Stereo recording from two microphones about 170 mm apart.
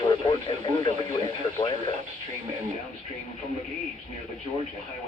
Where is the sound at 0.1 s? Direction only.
25° left (ahead or behind).